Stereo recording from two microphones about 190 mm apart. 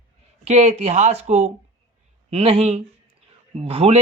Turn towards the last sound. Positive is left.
turn(degrees=-30)  # may be behind; listen again after turning